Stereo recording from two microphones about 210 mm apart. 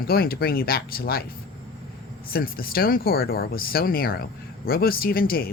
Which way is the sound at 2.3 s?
45° left (ahead or behind).